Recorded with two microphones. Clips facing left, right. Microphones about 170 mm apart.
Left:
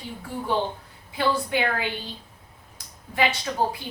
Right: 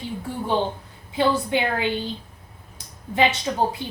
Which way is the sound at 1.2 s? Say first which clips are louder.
Right 3 dB; 25° right (ahead or behind).